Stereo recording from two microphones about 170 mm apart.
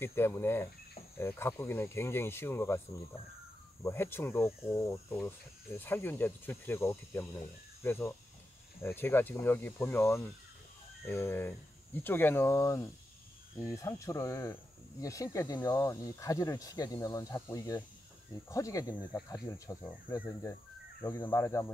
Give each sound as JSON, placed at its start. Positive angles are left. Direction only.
{"t": 0.0, "sound": "speech", "side_deg": 15}
{"t": 3.8, "sound": "speech", "side_deg": 15}
{"t": 21.0, "sound": "speech", "side_deg": 10}